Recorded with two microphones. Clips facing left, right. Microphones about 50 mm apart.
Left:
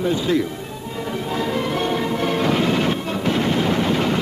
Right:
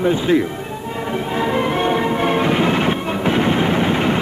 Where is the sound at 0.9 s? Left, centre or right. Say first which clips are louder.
Right 3 dB; right.